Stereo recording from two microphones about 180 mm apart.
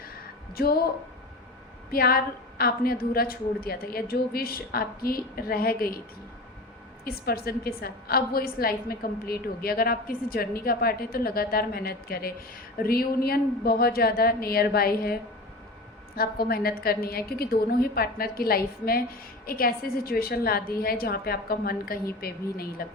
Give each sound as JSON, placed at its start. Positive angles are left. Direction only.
{"t": 0.5, "sound": "a woman's voice", "side_deg": 60}
{"t": 1.9, "sound": "a woman's voice", "side_deg": 55}
{"t": 7.0, "sound": "a woman's voice", "side_deg": 60}
{"t": 16.1, "sound": "a woman's voice", "side_deg": 55}